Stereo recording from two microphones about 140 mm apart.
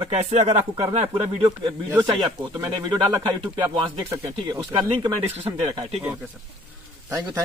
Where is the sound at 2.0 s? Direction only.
35° right (ahead or behind).